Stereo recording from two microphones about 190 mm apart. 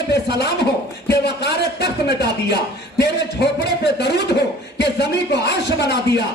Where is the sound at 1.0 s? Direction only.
60° left (ahead or behind).